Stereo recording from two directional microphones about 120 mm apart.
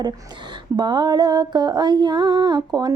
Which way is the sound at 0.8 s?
35° right (ahead or behind).